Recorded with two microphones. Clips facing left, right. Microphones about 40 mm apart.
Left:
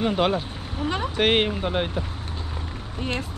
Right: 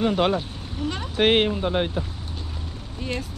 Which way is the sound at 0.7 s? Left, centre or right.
Centre.